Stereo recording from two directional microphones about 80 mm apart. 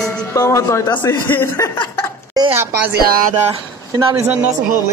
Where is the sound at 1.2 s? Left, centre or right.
Left.